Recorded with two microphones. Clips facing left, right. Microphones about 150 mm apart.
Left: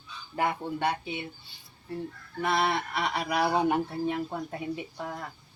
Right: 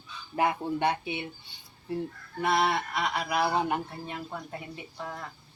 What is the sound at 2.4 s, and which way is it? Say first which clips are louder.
Fowl: right 1 dB; 15° right (ahead or behind).